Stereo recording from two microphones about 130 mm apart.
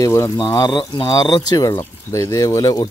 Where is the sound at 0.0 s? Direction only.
20° left (ahead or behind).